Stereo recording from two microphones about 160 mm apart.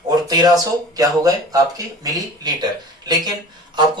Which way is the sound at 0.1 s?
25° right (ahead or behind).